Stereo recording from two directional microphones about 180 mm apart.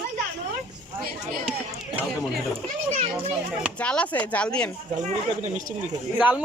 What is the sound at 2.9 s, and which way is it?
Speech, 35° right (ahead or behind).